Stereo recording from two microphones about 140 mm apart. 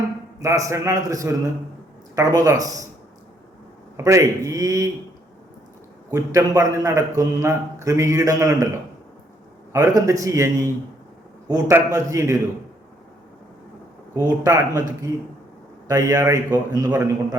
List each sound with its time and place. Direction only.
0.3 s a man's voice: 25° right (ahead or behind)
3.9 s a man's voice: 20° right (ahead or behind)
6.1 s a man's voice: 25° right (ahead or behind)
9.7 s a man's voice: 25° right (ahead or behind)
14.2 s a man's voice: 25° right (ahead or behind)